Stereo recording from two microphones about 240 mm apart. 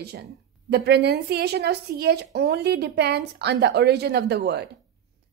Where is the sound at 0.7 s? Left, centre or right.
Right.